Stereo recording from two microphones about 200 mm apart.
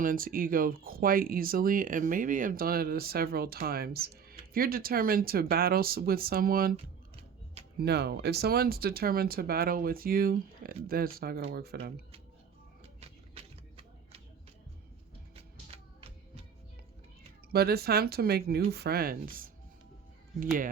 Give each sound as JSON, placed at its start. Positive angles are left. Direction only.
{"t": 0.0, "sound": "speech", "side_deg": -45}
{"t": 7.8, "sound": "speech", "side_deg": -55}
{"t": 12.8, "sound": "a sound", "side_deg": -30}
{"t": 17.5, "sound": "speech", "side_deg": -50}